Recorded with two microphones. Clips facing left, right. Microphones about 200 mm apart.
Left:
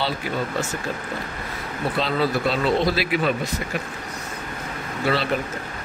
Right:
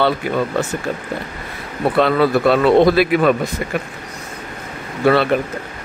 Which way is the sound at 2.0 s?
60° right (ahead or behind).